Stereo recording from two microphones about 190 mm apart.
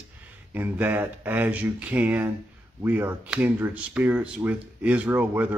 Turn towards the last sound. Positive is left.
turn(degrees=-10)  # may be behind; listen again after turning